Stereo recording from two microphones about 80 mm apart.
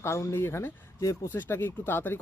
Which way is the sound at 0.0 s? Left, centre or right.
Left.